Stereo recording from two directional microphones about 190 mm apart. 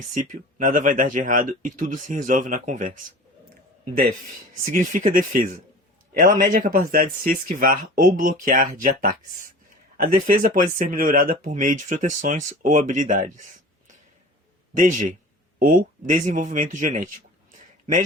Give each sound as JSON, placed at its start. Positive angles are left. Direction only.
{"t": 0.1, "sound": "speech", "side_deg": -45}
{"t": 4.7, "sound": "speech", "side_deg": -45}
{"t": 14.7, "sound": "a man's voice", "side_deg": -40}